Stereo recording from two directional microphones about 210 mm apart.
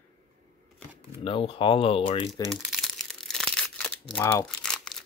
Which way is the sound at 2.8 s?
Centre (ahead or behind).